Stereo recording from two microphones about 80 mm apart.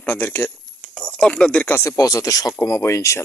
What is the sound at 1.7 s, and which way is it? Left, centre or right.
Speech, left.